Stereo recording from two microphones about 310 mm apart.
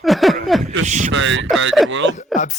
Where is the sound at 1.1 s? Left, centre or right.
Right.